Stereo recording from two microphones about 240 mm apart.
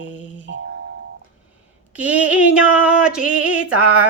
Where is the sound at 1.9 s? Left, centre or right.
Centre.